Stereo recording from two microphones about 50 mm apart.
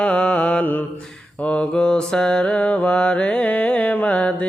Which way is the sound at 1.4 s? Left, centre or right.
Left.